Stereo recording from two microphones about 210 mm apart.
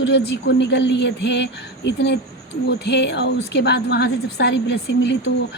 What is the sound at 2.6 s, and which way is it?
A woman's voice, 50° left (ahead or behind).